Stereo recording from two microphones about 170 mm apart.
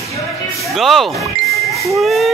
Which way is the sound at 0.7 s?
Centre (ahead or behind).